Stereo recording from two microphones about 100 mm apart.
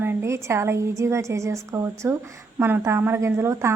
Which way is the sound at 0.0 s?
20° right (ahead or behind).